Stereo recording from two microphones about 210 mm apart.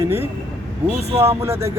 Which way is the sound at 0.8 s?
30° right (ahead or behind).